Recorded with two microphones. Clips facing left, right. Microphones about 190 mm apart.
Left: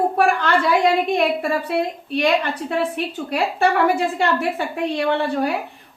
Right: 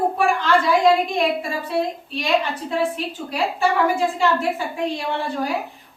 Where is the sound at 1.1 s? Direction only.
65° left (ahead or behind).